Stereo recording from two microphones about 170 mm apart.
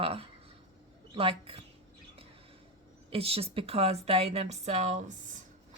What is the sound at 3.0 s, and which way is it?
Speech, 35° right (ahead or behind).